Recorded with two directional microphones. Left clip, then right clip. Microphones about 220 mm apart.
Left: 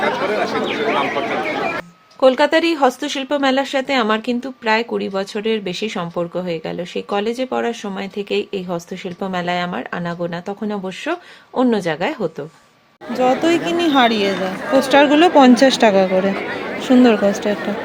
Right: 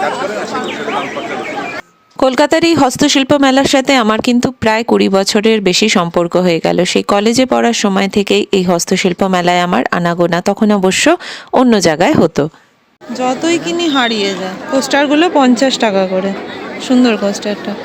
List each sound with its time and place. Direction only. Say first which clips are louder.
2.2 s speech: right 3 dB; 45° right (ahead or behind)
13.1 s speech: right 1 dB; centre (ahead or behind)